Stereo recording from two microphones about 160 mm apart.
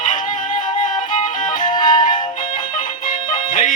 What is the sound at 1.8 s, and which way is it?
Music, 25° left (ahead or behind).